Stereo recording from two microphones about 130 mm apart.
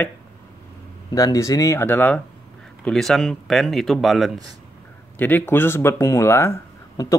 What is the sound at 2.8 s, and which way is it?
Speech, 5° left (ahead or behind).